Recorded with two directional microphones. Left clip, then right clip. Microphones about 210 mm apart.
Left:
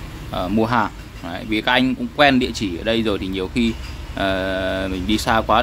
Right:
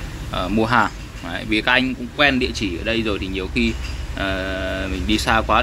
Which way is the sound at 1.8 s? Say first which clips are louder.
Left 2 dB; 25° left (ahead or behind).